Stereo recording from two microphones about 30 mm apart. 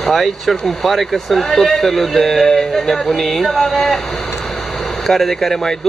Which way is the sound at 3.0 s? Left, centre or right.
Centre.